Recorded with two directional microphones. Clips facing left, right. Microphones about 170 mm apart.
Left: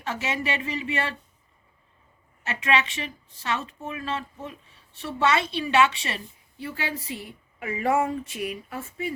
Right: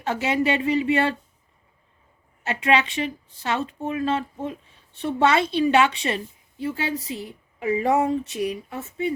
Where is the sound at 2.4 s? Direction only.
35° right (ahead or behind).